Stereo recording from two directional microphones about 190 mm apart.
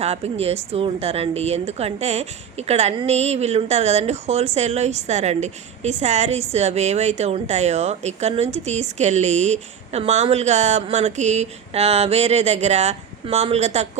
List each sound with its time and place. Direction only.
0.0 s a woman's voice: 35° right (ahead or behind)